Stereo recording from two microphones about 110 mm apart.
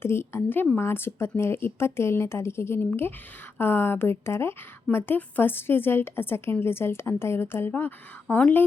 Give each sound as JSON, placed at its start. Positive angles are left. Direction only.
{"t": 0.0, "sound": "a woman's voice", "side_deg": 20}